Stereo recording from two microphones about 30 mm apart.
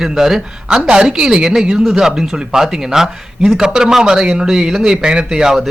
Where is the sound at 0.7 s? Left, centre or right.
Right.